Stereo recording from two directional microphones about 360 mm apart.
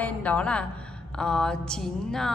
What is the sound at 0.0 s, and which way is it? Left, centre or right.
A woman's voice, centre.